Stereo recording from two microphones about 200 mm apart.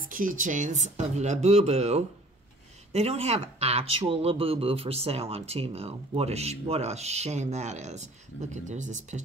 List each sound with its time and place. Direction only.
0.0 s speech: 40° right (ahead or behind)